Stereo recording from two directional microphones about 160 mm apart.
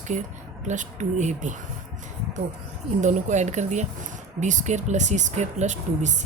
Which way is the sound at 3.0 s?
50° right (ahead or behind).